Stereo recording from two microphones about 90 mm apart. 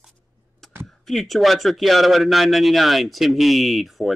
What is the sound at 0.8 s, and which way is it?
Speech, centre (ahead or behind).